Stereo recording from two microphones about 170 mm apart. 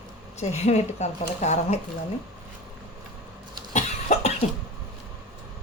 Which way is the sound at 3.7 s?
40° left (ahead or behind).